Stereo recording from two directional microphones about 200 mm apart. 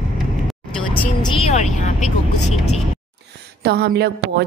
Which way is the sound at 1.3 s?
35° left (ahead or behind).